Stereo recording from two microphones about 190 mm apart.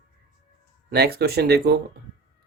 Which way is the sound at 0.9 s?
55° right (ahead or behind).